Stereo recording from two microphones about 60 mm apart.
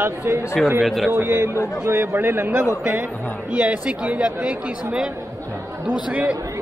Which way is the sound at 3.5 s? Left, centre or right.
Right.